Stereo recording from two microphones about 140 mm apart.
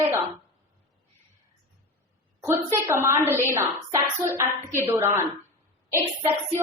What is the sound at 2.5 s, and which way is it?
A woman's voice, 20° right (ahead or behind).